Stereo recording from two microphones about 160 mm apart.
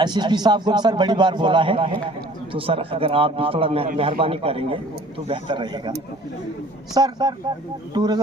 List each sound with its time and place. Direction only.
0.0 s a man's voice: 25° right (ahead or behind)
6.9 s a man's voice: 25° right (ahead or behind)